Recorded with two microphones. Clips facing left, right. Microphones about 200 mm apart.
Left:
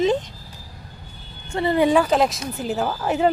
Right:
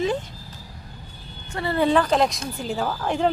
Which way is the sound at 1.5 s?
20° left (ahead or behind).